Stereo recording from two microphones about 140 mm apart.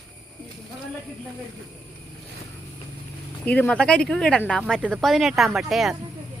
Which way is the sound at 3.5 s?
10° left (ahead or behind).